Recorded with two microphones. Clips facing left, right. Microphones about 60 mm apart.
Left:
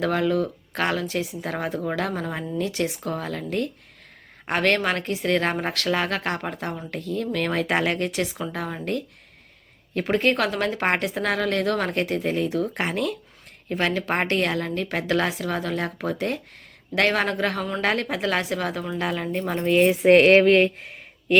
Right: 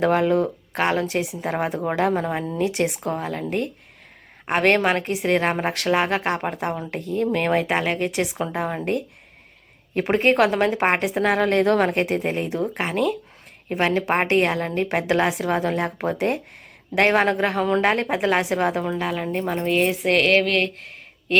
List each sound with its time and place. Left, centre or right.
0.0 s speech: right
4.5 s speech: right
8.4 s speech: right
11.3 s speech: right
12.7 s speech: centre
13.7 s speech: right
18.9 s speech: centre
19.3 s speech: centre
19.6 s speech: centre
20.0 s a sound: left